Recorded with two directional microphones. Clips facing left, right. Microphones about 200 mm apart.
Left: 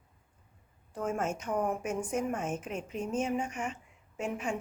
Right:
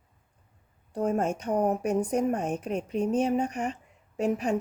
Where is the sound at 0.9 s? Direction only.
35° right (ahead or behind).